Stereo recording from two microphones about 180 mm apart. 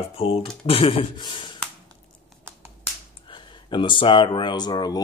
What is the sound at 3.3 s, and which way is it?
Speech, 25° left (ahead or behind).